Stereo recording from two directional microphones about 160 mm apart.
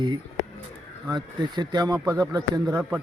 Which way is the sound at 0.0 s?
25° right (ahead or behind).